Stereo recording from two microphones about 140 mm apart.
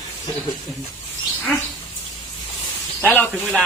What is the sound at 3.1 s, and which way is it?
Speech, 15° left (ahead or behind).